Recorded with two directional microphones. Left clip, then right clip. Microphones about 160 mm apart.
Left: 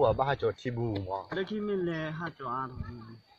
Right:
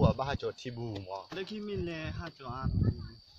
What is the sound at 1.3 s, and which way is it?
A man's voice, 20° right (ahead or behind).